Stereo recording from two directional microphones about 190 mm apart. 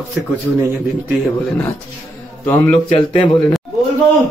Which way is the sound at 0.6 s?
10° right (ahead or behind).